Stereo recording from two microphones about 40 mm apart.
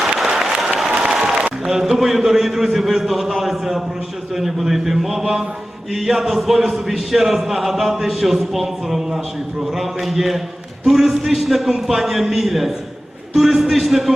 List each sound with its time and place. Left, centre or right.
0.3 s applause: centre
1.6 s a man's voice: centre